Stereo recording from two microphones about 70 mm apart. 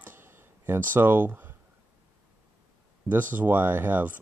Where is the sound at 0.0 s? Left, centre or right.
Right.